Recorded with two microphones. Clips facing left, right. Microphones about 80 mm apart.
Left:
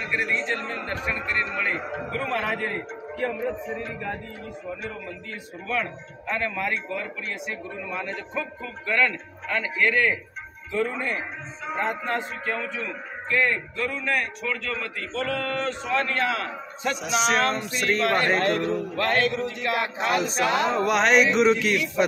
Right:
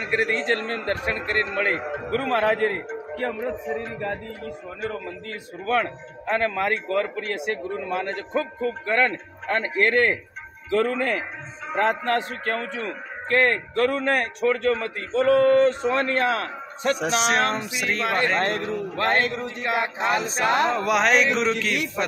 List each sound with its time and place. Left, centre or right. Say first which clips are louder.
0.1 s a man's voice: right 4 dB; right
5.7 s a man's voice: right 5 dB; right
8.6 s a man's voice: right 1 dB; right
10.7 s a man's voice: right 5 dB; right
17.6 s speech: left 2 dB; centre
18.7 s music: right 1 dB; right
20.2 s music: right 1 dB; right
20.7 s chant: even; centre